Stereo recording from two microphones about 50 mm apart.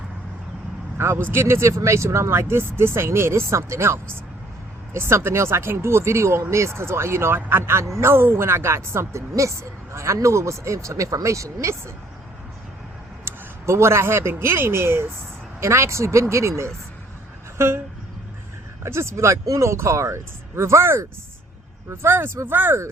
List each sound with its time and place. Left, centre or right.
0.9 s speech: right
1.6 s speech: right
13.2 s speech: right
15.6 s speech: right
17.6 s speech: right
18.8 s speech: right